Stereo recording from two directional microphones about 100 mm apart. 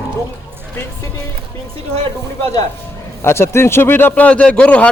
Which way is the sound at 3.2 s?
25° left (ahead or behind).